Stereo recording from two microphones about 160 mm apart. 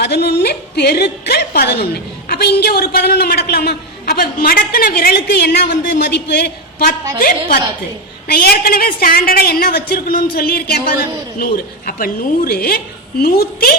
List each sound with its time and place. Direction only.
0.0 s a woman's voice: 90° left; by 13.7 s 70° left (ahead or behind)